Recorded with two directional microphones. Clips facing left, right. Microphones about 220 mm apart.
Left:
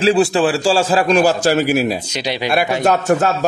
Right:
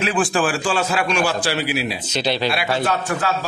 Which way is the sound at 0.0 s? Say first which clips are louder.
Left 6 dB; 25° left (ahead or behind).